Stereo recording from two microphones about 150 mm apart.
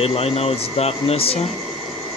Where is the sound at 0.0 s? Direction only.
40° left (ahead or behind).